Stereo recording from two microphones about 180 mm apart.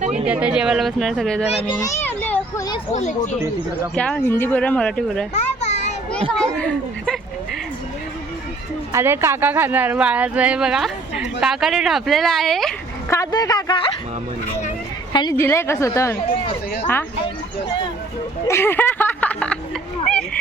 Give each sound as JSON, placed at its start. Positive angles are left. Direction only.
{"t": 0.3, "sound": "speech", "side_deg": -5}
{"t": 1.5, "sound": "speech", "side_deg": 35}
{"t": 1.8, "sound": "a sound", "side_deg": 15}
{"t": 2.9, "sound": "speech", "side_deg": 40}
{"t": 3.9, "sound": "speech", "side_deg": 5}
{"t": 5.3, "sound": "children playing", "side_deg": 40}
{"t": 6.3, "sound": "speech", "side_deg": 5}
{"t": 8.9, "sound": "speech", "side_deg": -15}
{"t": 13.1, "sound": "a man's voice", "side_deg": 20}
{"t": 15.1, "sound": "speech", "side_deg": 20}
{"t": 18.4, "sound": "speech", "side_deg": 15}